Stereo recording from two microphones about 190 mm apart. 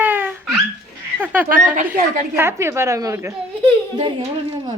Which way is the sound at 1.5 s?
45° right (ahead or behind).